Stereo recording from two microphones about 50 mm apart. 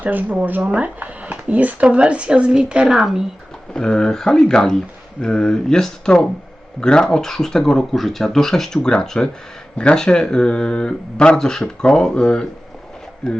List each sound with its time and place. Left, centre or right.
0.0 s speech: right; by 3.2 s centre
3.8 s speech: centre